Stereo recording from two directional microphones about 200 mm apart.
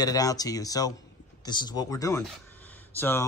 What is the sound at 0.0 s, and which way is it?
Speech, 15° left (ahead or behind).